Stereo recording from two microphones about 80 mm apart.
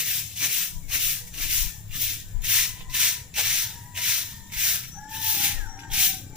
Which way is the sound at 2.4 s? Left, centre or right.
Centre.